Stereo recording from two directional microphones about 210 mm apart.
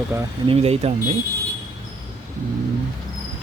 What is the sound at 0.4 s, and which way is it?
Speech, 30° right (ahead or behind).